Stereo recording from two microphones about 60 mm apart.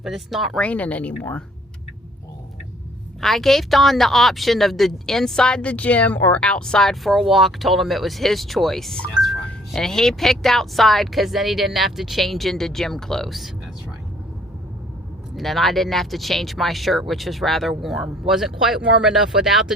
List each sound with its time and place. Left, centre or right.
0.0 s speech: centre
0.6 s speech: left
3.2 s speech: centre
5.6 s speech: left
7.0 s speech: centre
15.4 s speech: centre